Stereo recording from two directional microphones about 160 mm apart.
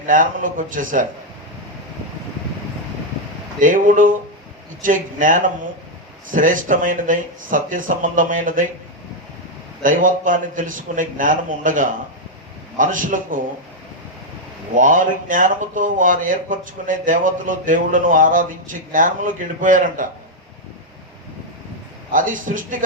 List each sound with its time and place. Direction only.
0.0 s speech: 55° right (ahead or behind)
3.6 s speech: 55° right (ahead or behind)
9.8 s speech: 55° right (ahead or behind)
14.8 s speech: 55° right (ahead or behind)
22.1 s speech: 55° right (ahead or behind)